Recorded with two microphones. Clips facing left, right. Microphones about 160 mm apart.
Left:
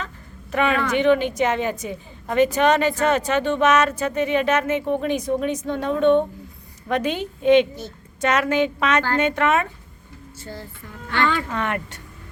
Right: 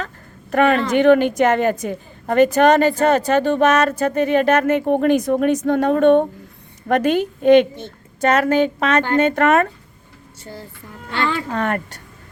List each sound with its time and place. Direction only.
0.5 s a woman's voice: 50° right (ahead or behind)
7.8 s a sound: 35° right (ahead or behind)
8.4 s speech: 40° right (ahead or behind)
9.3 s a woman's voice: 45° right (ahead or behind)
11.1 s speech: 30° right (ahead or behind)